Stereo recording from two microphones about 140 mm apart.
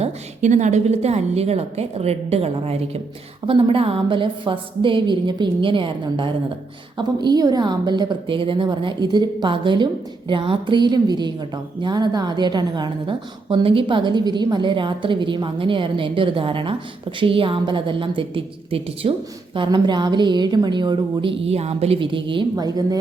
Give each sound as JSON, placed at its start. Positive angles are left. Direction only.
{"t": 0.0, "sound": "a woman's voice", "side_deg": -60}